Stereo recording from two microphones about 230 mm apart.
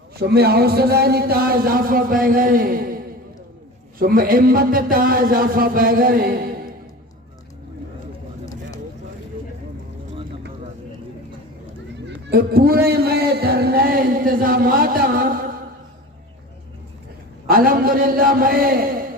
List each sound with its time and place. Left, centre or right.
0.2 s a man's voice: right
12.0 s a sound: right
17.5 s a man's voice: right